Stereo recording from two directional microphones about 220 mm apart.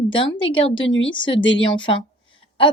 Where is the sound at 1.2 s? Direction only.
20° left (ahead or behind).